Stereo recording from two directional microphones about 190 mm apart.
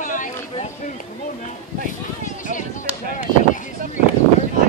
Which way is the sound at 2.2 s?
40° left (ahead or behind).